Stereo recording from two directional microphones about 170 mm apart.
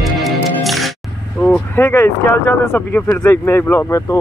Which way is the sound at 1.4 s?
10° left (ahead or behind).